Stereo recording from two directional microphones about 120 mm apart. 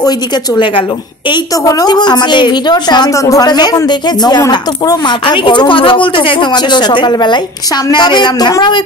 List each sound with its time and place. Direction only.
1.3 s a woman's voice: 30° left (ahead or behind)